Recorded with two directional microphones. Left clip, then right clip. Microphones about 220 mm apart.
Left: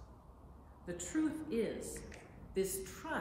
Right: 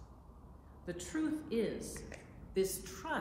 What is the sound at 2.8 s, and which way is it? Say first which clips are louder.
Speech: right 2 dB; 10° right (ahead or behind).